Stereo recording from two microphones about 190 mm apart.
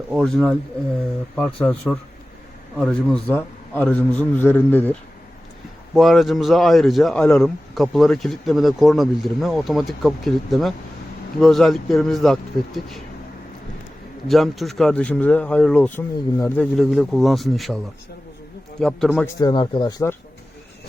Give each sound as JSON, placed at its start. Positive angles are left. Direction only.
{"t": 0.1, "sound": "a man's voice", "side_deg": 0}
{"t": 14.3, "sound": "speech", "side_deg": 0}
{"t": 18.8, "sound": "speech", "side_deg": 0}
{"t": 19.4, "sound": "speech", "side_deg": 25}